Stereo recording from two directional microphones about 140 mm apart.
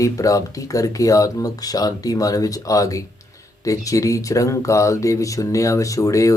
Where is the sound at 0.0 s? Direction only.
25° left (ahead or behind).